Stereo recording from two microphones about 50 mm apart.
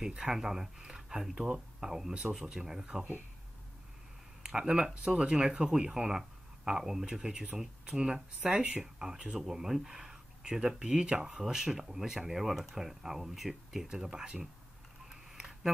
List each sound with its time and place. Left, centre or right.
0.0 s speech: centre
4.4 s speech: centre
8.8 s speech: centre
15.3 s a sound: centre